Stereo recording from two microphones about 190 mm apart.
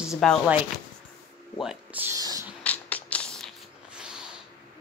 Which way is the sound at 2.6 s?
10° left (ahead or behind).